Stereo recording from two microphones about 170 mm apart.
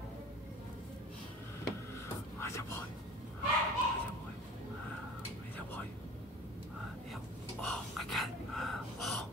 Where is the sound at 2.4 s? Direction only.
15° left (ahead or behind).